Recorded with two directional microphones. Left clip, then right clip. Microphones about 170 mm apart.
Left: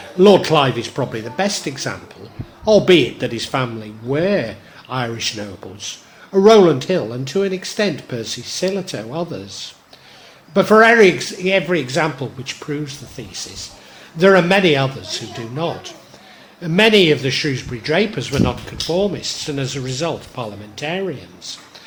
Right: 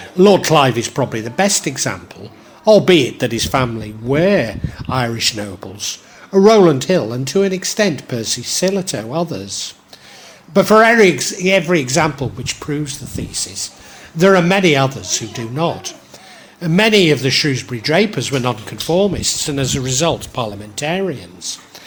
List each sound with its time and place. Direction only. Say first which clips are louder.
0.2 s a man's voice: right 1 dB; 40° right (ahead or behind)